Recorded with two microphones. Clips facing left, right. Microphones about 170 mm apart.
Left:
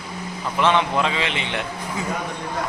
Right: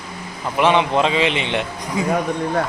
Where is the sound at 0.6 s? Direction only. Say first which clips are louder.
Right 4 dB; 15° right (ahead or behind).